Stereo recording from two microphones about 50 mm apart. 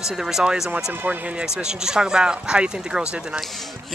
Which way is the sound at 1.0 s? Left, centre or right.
Right.